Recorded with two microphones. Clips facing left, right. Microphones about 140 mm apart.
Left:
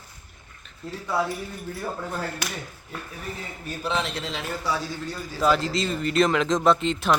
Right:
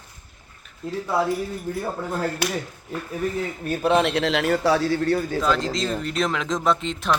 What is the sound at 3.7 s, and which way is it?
A man's voice, 55° right (ahead or behind).